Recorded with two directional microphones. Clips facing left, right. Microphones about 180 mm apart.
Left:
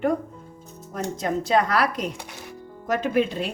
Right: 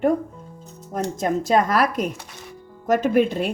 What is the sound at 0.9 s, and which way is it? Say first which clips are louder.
Speech: right 3 dB; 45° right (ahead or behind).